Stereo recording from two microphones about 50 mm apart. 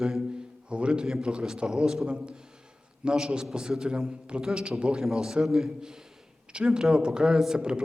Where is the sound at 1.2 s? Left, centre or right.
Centre.